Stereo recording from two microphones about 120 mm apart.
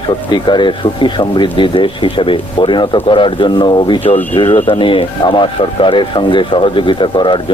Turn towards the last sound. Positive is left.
turn(degrees=40)  # may be behind; listen again after turning